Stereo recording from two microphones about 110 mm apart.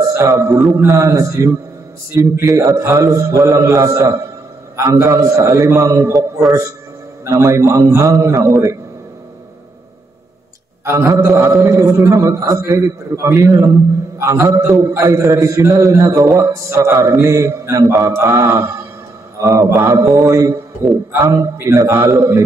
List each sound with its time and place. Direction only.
0.0 s a man's voice: 30° right (ahead or behind)
7.2 s a man's voice: 30° right (ahead or behind)
10.9 s a man's voice: 25° right (ahead or behind)